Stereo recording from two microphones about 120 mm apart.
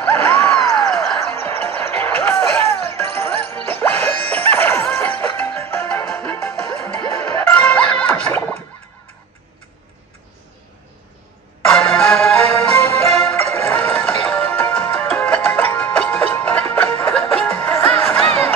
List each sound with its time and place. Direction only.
0.0 s a sound: 15° left (ahead or behind)
0.7 s music: 5° left (ahead or behind)
1.3 s music: 15° left (ahead or behind)
11.6 s music: 5° left (ahead or behind)
13.7 s music: 10° left (ahead or behind)
17.7 s music: 20° left (ahead or behind)